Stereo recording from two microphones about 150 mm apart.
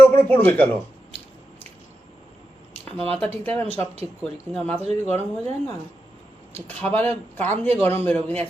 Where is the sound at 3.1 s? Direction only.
10° left (ahead or behind).